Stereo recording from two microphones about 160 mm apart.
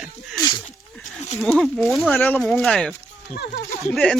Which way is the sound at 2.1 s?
10° left (ahead or behind).